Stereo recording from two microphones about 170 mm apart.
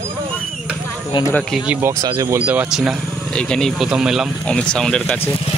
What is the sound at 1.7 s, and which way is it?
Speech, 15° right (ahead or behind).